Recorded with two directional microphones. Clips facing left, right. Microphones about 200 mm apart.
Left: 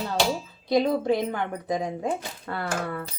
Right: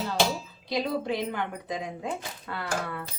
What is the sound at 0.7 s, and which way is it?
Speech, 50° left (ahead or behind).